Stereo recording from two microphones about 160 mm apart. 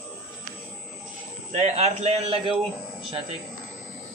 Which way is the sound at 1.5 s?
45° right (ahead or behind).